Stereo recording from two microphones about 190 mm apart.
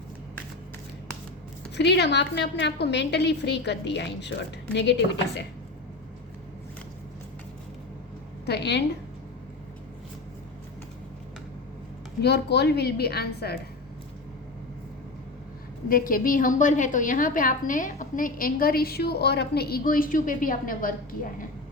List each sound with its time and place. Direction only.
1.7 s a woman's voice: 65° left (ahead or behind)
8.4 s a woman's voice: 60° left (ahead or behind)
12.2 s a woman's voice: 60° left (ahead or behind)
15.9 s a woman's voice: 50° left (ahead or behind)